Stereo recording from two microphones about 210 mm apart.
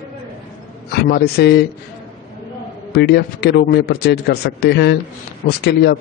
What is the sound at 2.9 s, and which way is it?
A man's voice, 50° left (ahead or behind).